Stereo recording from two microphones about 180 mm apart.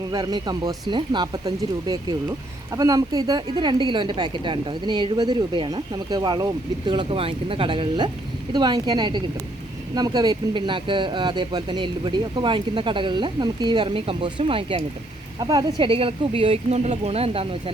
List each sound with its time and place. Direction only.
0.1 s a woman's voice: 20° right (ahead or behind)